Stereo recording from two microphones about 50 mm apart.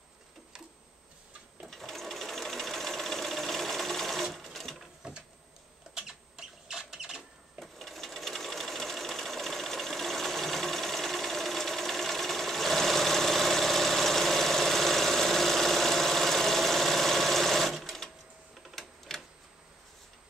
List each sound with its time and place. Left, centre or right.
1.7 s sewing machine: centre
5.0 s a sound: centre
5.9 s rodents: centre
7.6 s sewing machine: centre
18.8 s typewriter: centre